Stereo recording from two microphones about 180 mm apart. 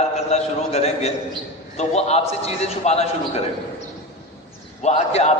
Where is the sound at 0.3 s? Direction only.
35° left (ahead or behind).